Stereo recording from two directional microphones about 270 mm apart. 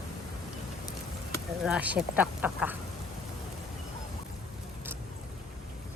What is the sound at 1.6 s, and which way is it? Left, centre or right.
Speech, centre.